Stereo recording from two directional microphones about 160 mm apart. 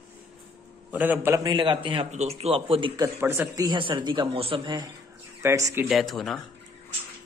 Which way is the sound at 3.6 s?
30° right (ahead or behind).